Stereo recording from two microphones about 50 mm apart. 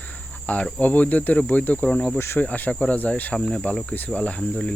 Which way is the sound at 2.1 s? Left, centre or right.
Left.